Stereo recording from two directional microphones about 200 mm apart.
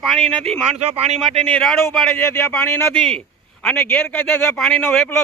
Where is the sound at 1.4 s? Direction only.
5° left (ahead or behind).